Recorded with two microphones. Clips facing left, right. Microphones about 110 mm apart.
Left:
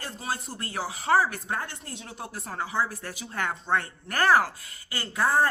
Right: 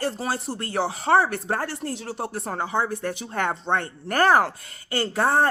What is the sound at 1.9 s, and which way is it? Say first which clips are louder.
Speech: right 10 dB; 80° right.